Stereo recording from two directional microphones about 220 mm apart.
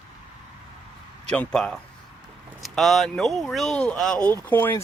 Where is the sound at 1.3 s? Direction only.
5° left (ahead or behind).